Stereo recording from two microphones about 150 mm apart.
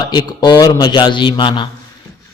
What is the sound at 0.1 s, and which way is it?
A man's voice, 30° left (ahead or behind).